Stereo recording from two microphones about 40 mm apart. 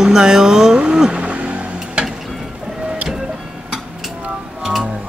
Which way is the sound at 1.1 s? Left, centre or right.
Right.